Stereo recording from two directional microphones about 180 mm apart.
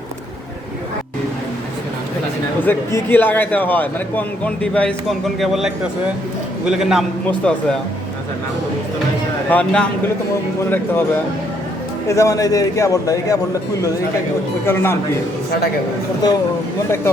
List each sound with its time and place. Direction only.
2.6 s speech: 10° left (ahead or behind)
9.5 s speech: 5° left (ahead or behind)
12.0 s a man's voice: 15° left (ahead or behind)
14.6 s speech: 15° left (ahead or behind)
16.2 s a man's voice: 20° left (ahead or behind)